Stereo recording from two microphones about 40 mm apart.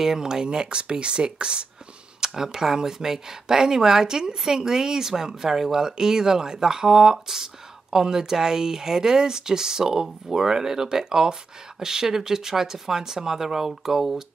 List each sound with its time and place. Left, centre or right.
0.0 s speech: centre